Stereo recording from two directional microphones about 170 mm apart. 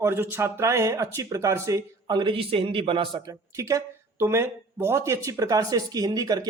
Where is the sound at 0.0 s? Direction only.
15° right (ahead or behind).